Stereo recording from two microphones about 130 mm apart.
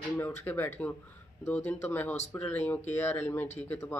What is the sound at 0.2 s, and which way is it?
Speech, 15° left (ahead or behind).